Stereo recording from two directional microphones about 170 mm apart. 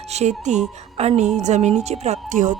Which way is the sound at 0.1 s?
40° right (ahead or behind).